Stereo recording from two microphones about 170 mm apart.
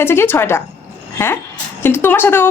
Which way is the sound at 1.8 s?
10° left (ahead or behind).